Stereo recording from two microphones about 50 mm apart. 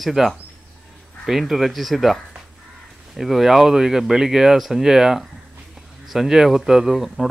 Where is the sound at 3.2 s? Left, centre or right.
Centre.